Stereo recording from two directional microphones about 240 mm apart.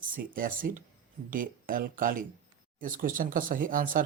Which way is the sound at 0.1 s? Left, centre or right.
Right.